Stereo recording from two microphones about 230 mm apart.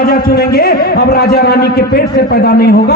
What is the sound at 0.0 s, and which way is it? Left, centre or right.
Speech, left.